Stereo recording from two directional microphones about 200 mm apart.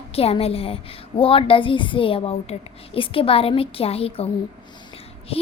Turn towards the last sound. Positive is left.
turn(degrees=30)  # may be behind; listen again after turning